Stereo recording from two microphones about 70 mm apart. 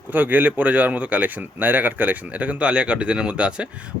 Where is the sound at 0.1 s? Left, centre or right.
Right.